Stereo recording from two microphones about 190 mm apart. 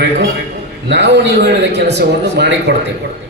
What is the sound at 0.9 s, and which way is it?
A man's voice, 65° right (ahead or behind).